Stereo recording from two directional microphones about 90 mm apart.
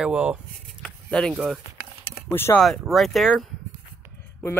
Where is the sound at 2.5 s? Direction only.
5° left (ahead or behind).